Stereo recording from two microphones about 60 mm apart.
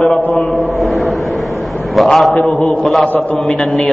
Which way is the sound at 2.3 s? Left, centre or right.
Centre.